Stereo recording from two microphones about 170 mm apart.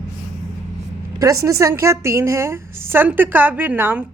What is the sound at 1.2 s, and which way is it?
A woman's voice, 20° right (ahead or behind).